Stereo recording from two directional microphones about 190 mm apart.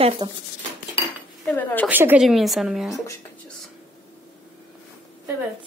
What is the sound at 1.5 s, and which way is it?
Speech, 10° left (ahead or behind).